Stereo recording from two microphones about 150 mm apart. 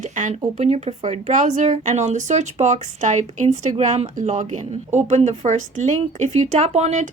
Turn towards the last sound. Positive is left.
turn(degrees=-50)  # may be behind; listen again after turning